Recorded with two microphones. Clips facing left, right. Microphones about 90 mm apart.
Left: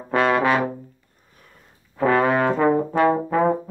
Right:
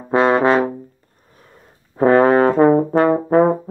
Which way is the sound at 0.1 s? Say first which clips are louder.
Right 5 dB; 25° right (ahead or behind).